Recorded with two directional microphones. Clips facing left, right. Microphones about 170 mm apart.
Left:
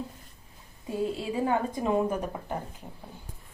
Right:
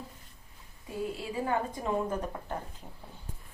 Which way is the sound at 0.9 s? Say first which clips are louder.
Left 5 dB; 25° left (ahead or behind).